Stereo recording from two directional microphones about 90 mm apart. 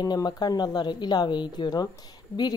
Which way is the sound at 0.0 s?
50° left (ahead or behind).